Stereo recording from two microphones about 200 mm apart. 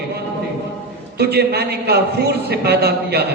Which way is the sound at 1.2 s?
55° right (ahead or behind).